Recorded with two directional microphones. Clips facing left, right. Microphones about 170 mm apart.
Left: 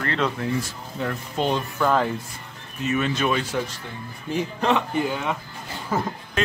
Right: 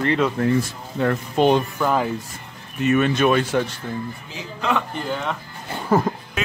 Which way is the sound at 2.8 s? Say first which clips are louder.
Right 6 dB; 60° right (ahead or behind).